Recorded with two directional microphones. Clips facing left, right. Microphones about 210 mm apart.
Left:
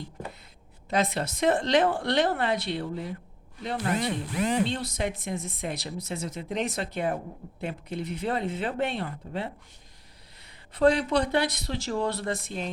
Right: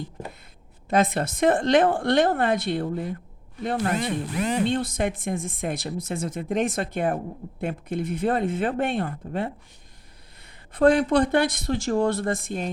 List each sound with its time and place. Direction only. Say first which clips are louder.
0.9 s speech: right 5 dB; 50° right (ahead or behind)
10.8 s speech: right 4 dB; 50° right (ahead or behind)